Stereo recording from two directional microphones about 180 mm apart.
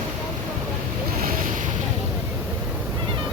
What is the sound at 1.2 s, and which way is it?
Boat, 50° right (ahead or behind).